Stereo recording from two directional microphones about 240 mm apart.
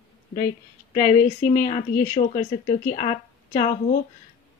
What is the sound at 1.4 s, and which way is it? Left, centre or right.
Speech, left.